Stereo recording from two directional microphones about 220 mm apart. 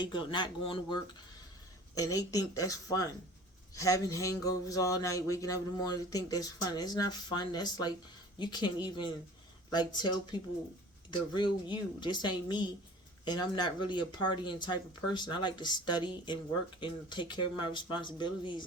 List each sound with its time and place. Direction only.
0.0 s speech: 20° left (ahead or behind)
2.0 s a sound: 15° left (ahead or behind)
8.4 s speech: 20° left (ahead or behind)